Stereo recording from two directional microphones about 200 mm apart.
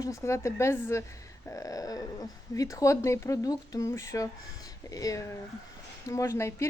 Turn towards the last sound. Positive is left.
turn(degrees=15)  # may be behind; listen again after turning